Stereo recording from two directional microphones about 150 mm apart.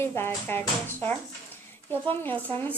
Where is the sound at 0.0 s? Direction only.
15° left (ahead or behind).